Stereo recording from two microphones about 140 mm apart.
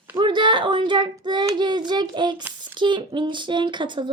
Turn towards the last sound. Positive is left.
turn(degrees=-35)  # may be behind; listen again after turning